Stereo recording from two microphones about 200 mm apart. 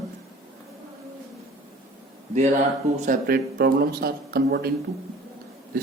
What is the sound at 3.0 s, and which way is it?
A man's voice, 50° right (ahead or behind).